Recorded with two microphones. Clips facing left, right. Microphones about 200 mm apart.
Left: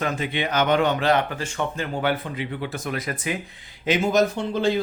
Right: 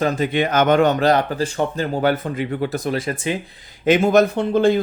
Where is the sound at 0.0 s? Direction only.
40° right (ahead or behind).